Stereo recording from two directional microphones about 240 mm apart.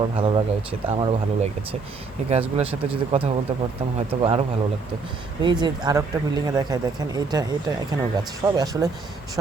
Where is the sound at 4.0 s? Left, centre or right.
Right.